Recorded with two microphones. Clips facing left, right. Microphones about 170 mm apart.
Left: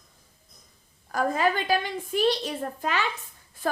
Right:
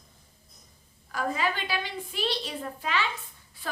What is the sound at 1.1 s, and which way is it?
A woman's voice, 45° left (ahead or behind).